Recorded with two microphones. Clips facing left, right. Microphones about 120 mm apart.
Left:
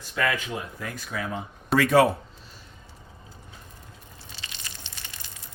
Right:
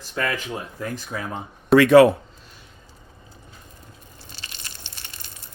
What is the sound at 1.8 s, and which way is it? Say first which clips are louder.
Speech: right 7 dB; 90° right.